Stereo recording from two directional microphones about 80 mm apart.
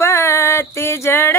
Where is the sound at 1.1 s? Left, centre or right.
Left.